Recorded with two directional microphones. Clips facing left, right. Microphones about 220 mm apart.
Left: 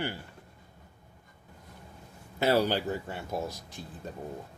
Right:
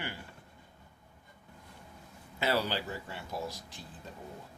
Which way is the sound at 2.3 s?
45° left (ahead or behind).